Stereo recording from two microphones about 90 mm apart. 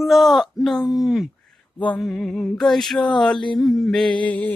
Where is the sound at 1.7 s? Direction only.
15° left (ahead or behind).